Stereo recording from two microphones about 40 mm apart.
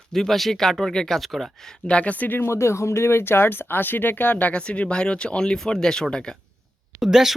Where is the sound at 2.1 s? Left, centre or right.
Left.